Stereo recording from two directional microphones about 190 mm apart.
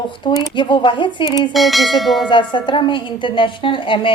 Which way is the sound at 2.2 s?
25° left (ahead or behind).